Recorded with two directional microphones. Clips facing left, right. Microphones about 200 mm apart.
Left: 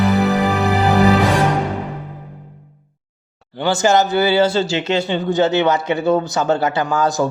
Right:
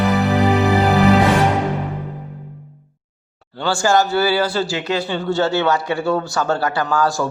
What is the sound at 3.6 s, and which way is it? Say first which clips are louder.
Speech: left 2 dB; 20° left (ahead or behind).